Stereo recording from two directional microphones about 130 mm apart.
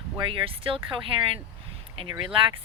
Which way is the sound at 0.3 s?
45° right (ahead or behind).